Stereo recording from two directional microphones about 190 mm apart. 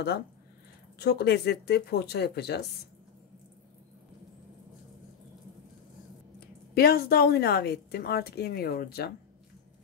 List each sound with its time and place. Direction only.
0.9 s a woman's voice: 60° left (ahead or behind)
6.7 s a woman's voice: 55° left (ahead or behind)